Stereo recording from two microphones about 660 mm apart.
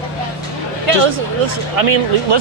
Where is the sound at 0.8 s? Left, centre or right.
Right.